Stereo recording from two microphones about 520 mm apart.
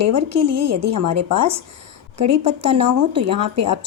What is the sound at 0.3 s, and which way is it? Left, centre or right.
Speech, right.